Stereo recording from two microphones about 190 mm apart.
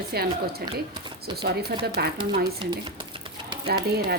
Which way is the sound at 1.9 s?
60° right (ahead or behind).